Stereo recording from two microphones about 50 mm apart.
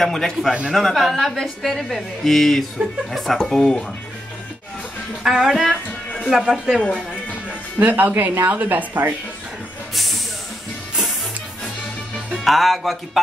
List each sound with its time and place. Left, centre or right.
0.0 s a woman's voice: centre
5.2 s speech: centre
7.8 s a woman's voice: right
12.3 s speech: centre